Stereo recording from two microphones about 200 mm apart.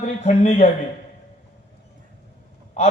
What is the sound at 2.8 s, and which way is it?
Speech, 35° left (ahead or behind).